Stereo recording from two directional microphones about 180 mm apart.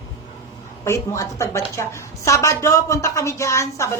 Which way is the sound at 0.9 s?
15° left (ahead or behind).